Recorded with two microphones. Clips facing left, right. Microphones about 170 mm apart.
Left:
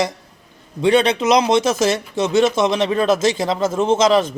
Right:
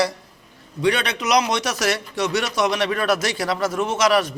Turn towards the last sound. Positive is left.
turn(degrees=25)  # may be behind; listen again after turning